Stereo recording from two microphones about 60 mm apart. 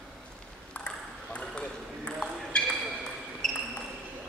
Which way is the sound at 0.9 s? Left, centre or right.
Centre.